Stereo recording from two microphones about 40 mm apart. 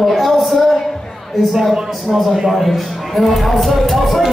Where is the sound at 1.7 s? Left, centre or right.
Centre.